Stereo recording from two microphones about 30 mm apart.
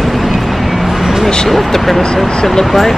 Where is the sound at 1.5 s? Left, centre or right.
Centre.